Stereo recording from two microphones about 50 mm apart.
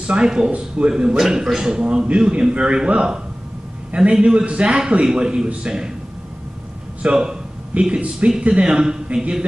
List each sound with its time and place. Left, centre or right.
0.0 s a man's voice: centre
7.0 s speech: right